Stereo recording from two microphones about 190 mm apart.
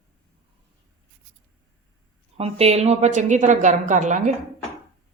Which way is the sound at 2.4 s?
35° right (ahead or behind).